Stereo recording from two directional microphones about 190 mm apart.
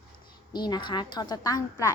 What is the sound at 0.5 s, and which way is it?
A child's voice, 20° left (ahead or behind).